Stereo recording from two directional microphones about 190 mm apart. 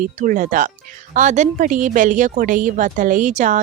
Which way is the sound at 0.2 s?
45° right (ahead or behind).